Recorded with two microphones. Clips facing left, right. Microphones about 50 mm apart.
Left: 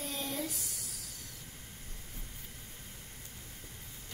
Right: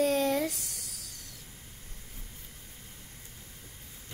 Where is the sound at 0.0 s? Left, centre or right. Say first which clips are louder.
Right 12 dB; right.